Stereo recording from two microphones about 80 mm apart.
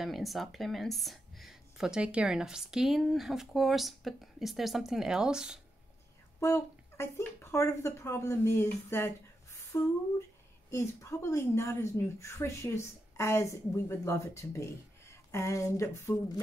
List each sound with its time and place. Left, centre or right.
0.0 s speech: centre
6.4 s a woman's voice: left